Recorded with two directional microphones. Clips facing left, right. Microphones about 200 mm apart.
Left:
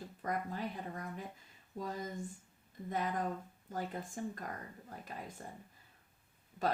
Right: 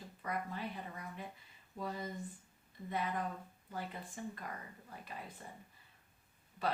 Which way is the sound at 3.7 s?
45° left (ahead or behind).